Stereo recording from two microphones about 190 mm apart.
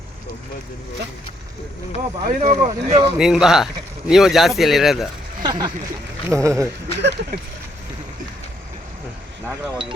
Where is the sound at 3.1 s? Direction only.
5° right (ahead or behind).